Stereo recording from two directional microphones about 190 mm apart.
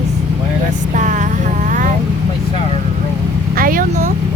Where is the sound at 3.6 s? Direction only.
50° right (ahead or behind).